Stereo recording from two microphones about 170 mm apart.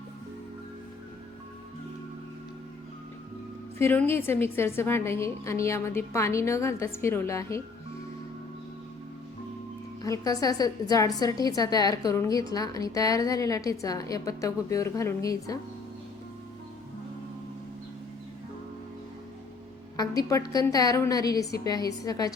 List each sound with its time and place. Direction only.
3.8 s a woman's voice: 15° left (ahead or behind)
10.0 s a woman's voice: 20° left (ahead or behind)
20.0 s a woman's voice: 20° left (ahead or behind)